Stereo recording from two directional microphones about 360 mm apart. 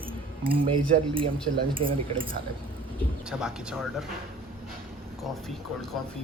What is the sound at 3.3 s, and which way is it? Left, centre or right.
Speech, centre.